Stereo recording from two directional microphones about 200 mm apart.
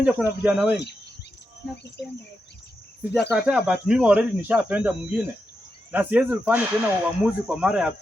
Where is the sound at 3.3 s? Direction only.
5° right (ahead or behind).